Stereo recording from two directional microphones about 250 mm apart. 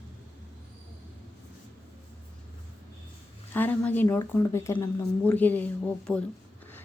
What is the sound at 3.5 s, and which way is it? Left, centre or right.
A woman's voice, centre.